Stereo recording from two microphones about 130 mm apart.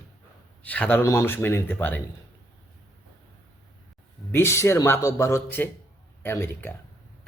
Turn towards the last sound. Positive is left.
turn(degrees=20)  # may be behind; listen again after turning